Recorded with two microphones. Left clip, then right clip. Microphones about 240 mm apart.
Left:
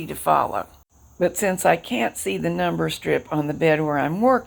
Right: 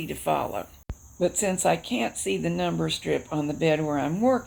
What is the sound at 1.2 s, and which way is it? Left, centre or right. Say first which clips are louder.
Speech: left 5 dB; left.